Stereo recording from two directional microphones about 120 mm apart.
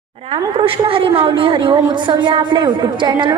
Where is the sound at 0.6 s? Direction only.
50° right (ahead or behind).